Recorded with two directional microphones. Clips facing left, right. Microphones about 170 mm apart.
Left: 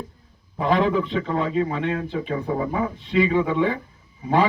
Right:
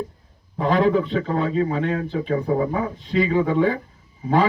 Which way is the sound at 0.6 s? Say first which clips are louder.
Right 2 dB; 40° right (ahead or behind).